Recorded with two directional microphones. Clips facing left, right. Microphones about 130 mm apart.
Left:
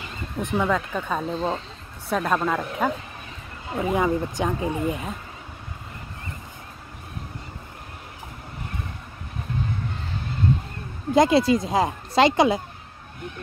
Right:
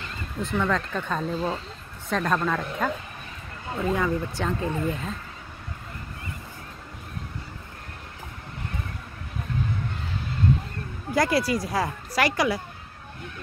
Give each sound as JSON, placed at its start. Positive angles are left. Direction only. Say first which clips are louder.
{"t": 0.4, "sound": "speech", "louder": "left 2 dB", "side_deg": 15}
{"t": 3.7, "sound": "speech", "louder": "left 3 dB", "side_deg": 20}
{"t": 11.1, "sound": "speech", "louder": "left 6 dB", "side_deg": 20}